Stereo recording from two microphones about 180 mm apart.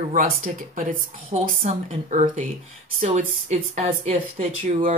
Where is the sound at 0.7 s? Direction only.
45° right (ahead or behind).